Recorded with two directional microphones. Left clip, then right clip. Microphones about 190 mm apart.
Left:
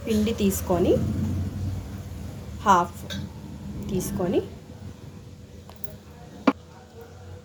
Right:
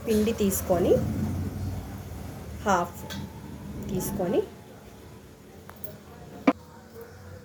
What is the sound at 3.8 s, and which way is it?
Speech, 35° left (ahead or behind).